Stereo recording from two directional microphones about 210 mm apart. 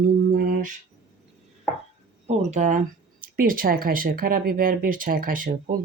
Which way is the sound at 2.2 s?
35° right (ahead or behind).